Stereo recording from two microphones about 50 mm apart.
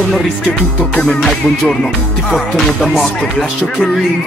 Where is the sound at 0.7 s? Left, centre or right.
Left.